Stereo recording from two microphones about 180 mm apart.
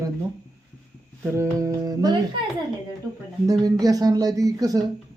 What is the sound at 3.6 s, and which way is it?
A woman's voice, 20° right (ahead or behind).